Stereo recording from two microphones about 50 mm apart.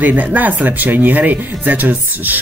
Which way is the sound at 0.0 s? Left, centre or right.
Right.